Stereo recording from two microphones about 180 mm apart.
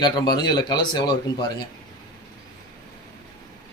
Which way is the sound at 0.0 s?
25° left (ahead or behind).